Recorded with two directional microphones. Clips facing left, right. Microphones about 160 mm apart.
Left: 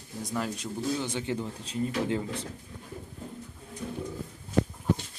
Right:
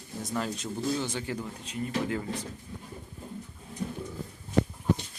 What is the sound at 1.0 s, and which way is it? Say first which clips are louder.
Speech: left 1 dB; 20° left (ahead or behind).